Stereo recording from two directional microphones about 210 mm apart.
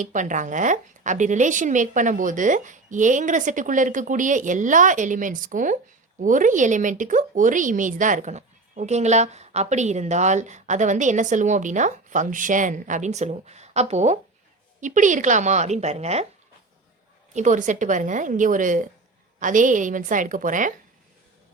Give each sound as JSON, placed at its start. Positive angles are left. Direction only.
{"t": 0.0, "sound": "a woman's voice", "side_deg": -35}
{"t": 17.3, "sound": "a woman's voice", "side_deg": -35}